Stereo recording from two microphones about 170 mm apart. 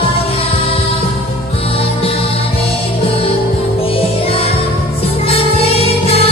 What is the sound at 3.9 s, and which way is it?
Music, 35° left (ahead or behind).